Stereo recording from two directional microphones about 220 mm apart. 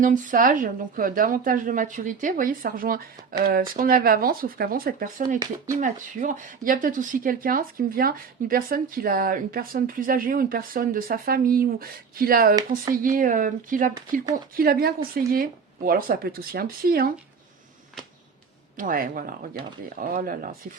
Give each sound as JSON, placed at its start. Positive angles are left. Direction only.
{"t": 0.0, "sound": "speech", "side_deg": -35}
{"t": 18.8, "sound": "speech", "side_deg": -40}